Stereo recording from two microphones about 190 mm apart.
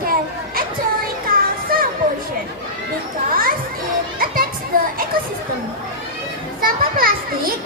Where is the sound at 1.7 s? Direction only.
50° right (ahead or behind).